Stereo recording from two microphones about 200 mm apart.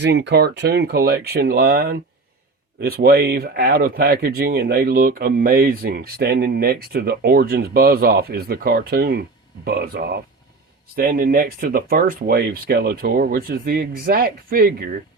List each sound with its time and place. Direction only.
0.0 s speech: 60° right (ahead or behind)